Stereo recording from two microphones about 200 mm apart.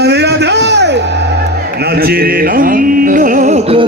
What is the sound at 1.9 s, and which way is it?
Music, 50° right (ahead or behind).